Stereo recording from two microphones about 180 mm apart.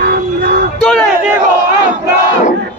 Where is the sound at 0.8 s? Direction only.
5° left (ahead or behind).